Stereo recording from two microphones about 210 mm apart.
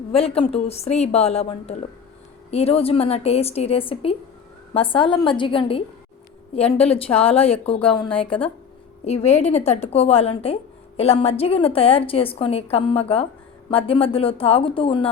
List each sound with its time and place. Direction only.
0.1 s a woman's voice: 25° left (ahead or behind)